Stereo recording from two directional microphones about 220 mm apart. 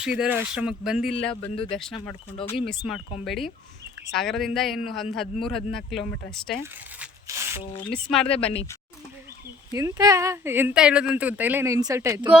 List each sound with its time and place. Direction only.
0.0 s speech: 5° right (ahead or behind)
6.6 s speech: 10° right (ahead or behind)
7.9 s speech: 5° left (ahead or behind)
8.3 s speech: 25° left (ahead or behind)
9.7 s speech: 15° right (ahead or behind)